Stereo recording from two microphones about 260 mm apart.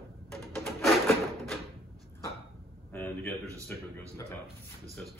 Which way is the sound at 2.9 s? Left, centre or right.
Centre.